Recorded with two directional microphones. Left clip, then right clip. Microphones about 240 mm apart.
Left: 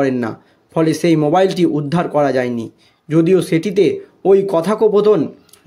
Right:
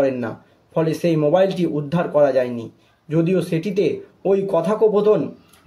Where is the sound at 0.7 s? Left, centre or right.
Left.